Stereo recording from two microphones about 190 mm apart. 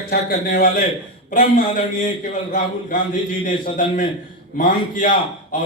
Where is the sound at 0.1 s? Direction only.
50° left (ahead or behind).